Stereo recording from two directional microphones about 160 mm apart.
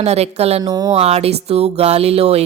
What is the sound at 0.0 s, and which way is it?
Speech, 40° right (ahead or behind).